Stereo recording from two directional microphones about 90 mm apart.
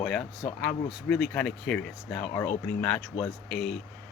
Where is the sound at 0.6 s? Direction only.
10° left (ahead or behind).